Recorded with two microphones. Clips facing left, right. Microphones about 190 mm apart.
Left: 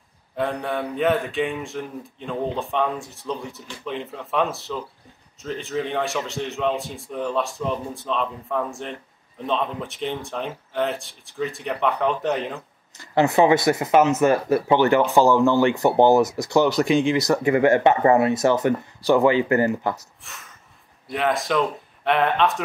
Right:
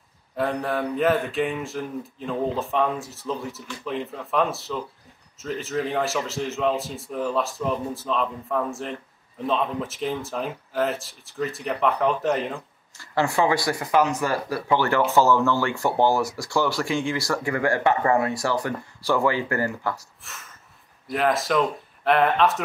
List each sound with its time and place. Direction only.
0.4 s a man's voice: centre (ahead or behind)
12.9 s speech: 20° left (ahead or behind)
20.2 s a sound: centre (ahead or behind)
21.1 s a man's voice: centre (ahead or behind)